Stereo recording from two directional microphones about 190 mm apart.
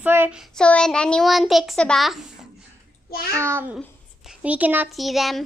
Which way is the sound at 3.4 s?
10° right (ahead or behind).